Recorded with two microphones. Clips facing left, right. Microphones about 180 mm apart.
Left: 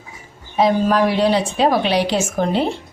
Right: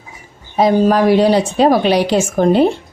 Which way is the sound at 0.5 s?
40° right (ahead or behind).